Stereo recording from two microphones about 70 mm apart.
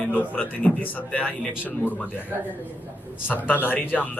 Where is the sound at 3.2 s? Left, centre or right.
Left.